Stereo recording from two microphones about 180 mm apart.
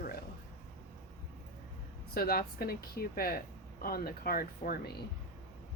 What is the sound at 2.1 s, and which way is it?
Speech, 55° left (ahead or behind).